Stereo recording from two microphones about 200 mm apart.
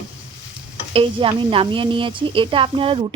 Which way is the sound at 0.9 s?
25° right (ahead or behind).